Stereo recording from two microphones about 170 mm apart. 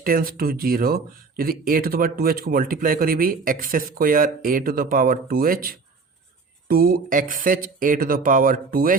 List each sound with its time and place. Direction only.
0.0 s speech: 60° right (ahead or behind)